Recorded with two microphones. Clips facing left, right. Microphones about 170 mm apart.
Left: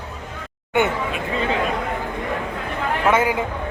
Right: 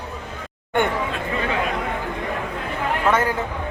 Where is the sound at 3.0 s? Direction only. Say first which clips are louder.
Left 2 dB; 10° left (ahead or behind).